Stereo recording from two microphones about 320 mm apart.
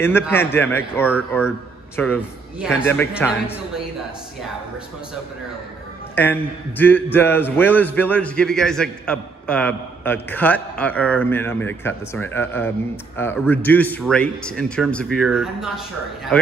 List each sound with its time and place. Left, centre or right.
0.2 s a man's voice: centre
6.8 s a man's voice: centre